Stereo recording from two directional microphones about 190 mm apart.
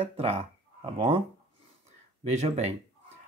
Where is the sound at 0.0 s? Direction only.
30° right (ahead or behind).